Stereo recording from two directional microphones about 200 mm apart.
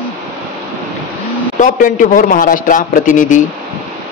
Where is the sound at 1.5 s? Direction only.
40° left (ahead or behind).